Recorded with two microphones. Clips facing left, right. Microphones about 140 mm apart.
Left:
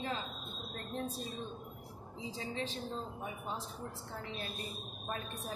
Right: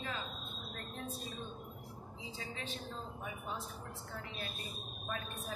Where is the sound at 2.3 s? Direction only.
35° left (ahead or behind).